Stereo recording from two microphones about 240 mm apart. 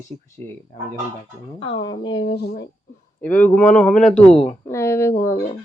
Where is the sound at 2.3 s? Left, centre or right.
Left.